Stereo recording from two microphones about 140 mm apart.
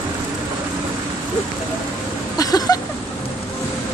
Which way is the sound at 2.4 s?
25° left (ahead or behind).